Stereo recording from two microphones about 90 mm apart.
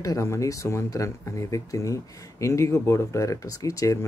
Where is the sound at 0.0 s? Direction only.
35° left (ahead or behind).